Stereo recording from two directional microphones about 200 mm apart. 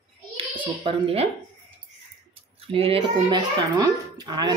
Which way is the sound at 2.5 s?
30° right (ahead or behind).